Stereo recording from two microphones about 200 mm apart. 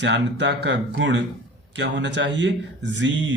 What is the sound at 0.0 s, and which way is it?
A man's voice, 60° right (ahead or behind).